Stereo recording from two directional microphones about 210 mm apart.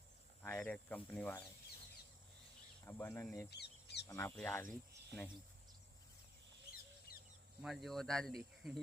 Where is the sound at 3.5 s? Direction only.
50° left (ahead or behind).